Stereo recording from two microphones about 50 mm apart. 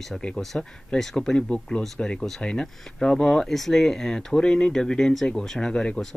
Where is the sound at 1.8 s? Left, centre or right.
Centre.